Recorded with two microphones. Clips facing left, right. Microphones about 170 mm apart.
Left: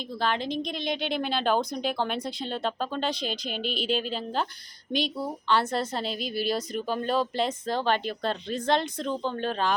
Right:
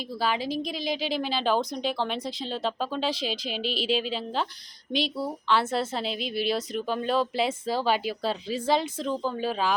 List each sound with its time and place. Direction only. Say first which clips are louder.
0.2 s speech: even; 5° right (ahead or behind)